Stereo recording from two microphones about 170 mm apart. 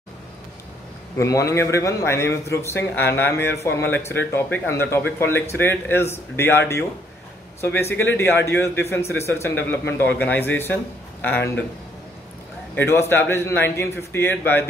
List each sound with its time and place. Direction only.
1.1 s speech: 20° left (ahead or behind)
7.6 s speech: 10° left (ahead or behind)
12.7 s speech: 15° left (ahead or behind)